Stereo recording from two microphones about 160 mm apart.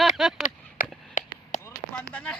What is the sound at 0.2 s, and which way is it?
Speech, centre (ahead or behind).